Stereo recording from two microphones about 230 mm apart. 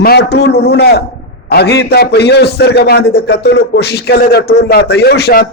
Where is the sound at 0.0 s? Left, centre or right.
Left.